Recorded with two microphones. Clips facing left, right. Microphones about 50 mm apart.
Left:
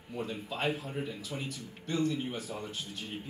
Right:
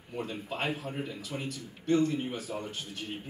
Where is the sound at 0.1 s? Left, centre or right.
Right.